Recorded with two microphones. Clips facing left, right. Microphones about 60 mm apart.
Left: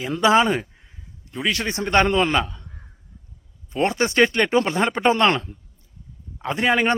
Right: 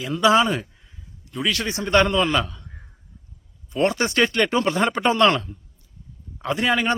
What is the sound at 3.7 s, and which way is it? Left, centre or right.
A man's voice, left.